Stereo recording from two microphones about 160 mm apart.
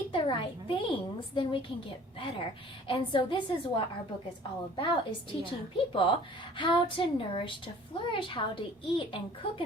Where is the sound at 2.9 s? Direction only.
35° left (ahead or behind).